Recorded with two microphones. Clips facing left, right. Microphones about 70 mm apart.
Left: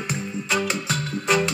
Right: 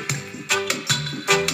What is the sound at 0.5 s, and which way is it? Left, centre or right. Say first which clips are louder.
Music: even; right.